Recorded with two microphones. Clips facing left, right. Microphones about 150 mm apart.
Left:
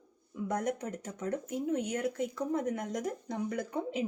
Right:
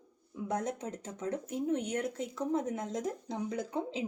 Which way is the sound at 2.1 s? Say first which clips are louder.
Even; 25° right (ahead or behind).